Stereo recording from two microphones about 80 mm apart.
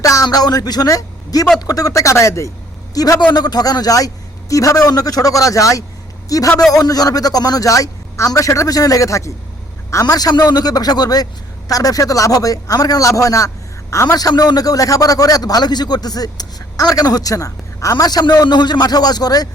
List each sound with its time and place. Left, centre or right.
0.0 s speech: left
2.9 s a man's voice: left
3.2 s a man's voice: left
14.2 s a man's voice: left